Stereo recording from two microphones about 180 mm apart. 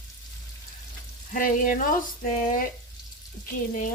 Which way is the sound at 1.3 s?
50° left (ahead or behind).